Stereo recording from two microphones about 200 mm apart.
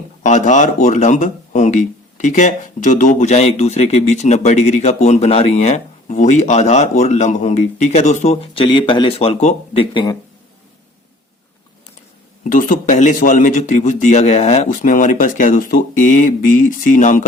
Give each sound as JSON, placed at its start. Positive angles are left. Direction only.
{"t": 0.2, "sound": "speech", "side_deg": 40}
{"t": 12.5, "sound": "speech", "side_deg": 40}